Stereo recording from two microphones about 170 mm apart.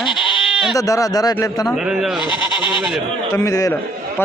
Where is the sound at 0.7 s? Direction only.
20° left (ahead or behind).